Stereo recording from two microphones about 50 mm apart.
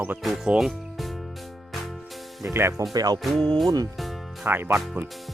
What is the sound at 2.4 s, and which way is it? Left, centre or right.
Speech, right.